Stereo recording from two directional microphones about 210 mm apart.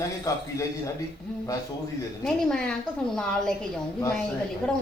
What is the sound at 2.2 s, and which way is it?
Speech, 5° left (ahead or behind).